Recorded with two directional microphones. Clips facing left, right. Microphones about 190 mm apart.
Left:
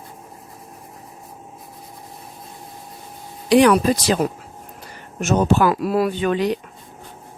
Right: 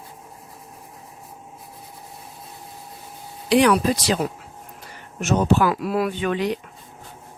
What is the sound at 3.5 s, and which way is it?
Speech, 45° left (ahead or behind).